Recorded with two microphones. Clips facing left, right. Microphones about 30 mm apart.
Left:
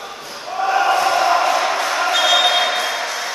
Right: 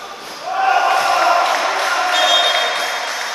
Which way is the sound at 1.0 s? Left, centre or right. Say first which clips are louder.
Right 1 dB; centre.